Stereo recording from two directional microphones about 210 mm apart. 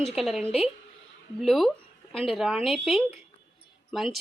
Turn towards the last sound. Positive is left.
turn(degrees=0)  # may be behind; listen again after turning